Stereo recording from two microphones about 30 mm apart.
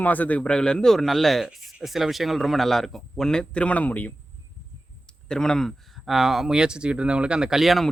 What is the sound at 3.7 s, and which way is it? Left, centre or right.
Speech, left.